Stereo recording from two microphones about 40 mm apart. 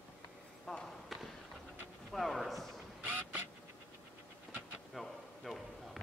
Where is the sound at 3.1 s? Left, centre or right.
Right.